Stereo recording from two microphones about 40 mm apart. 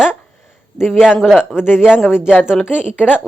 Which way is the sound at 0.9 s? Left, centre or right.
Centre.